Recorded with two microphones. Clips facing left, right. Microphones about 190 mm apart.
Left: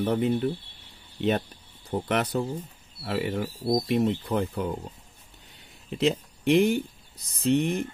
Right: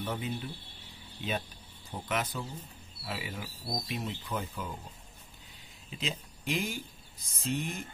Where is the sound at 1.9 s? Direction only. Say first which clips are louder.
Left 8 dB; 65° left (ahead or behind).